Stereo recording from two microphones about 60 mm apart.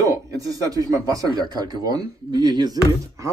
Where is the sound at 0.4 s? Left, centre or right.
Right.